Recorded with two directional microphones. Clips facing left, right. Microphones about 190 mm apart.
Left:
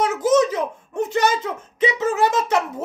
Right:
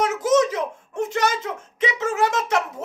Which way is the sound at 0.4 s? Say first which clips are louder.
Left 2 dB; centre (ahead or behind).